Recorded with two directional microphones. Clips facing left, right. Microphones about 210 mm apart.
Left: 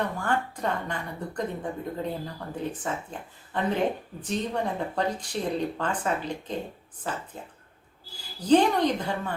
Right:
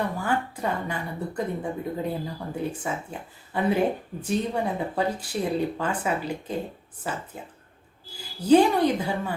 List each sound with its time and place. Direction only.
0.2 s speech: 5° right (ahead or behind)
8.4 s speech: 10° right (ahead or behind)